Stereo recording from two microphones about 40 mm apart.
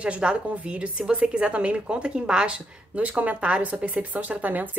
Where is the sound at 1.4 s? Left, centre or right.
Right.